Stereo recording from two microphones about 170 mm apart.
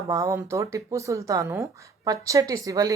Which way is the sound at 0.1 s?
20° right (ahead or behind).